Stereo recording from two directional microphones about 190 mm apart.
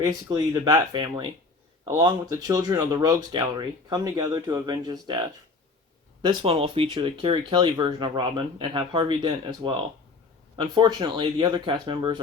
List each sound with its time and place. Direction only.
0.0 s speech: 20° right (ahead or behind)
6.2 s speech: 30° right (ahead or behind)